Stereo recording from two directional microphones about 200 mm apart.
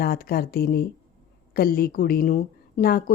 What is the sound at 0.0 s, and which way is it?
A woman's voice, 50° left (ahead or behind).